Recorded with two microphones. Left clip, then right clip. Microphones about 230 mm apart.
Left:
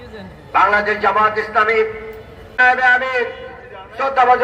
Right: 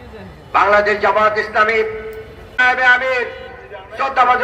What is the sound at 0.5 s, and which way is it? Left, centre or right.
A man's voice, right.